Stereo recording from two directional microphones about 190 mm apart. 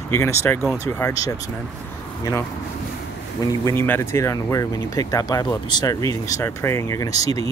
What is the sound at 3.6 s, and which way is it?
Speech, 10° left (ahead or behind).